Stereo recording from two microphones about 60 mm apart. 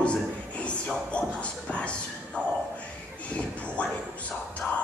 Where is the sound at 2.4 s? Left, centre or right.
Left.